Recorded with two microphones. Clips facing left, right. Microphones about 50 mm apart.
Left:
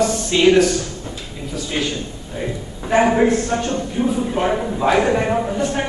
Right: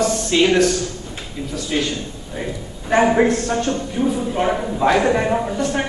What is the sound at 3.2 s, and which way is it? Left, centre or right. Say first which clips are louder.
Speech: left 1 dB; left.